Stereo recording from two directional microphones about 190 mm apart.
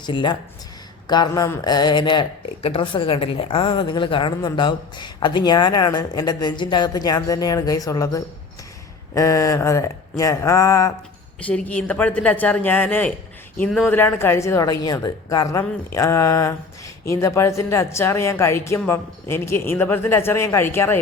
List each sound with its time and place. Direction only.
0.0 s speech: 25° left (ahead or behind)